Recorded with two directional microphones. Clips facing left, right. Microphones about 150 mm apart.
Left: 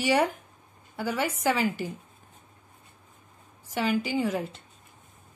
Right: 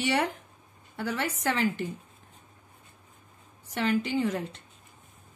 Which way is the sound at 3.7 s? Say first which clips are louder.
Even; 5° left (ahead or behind).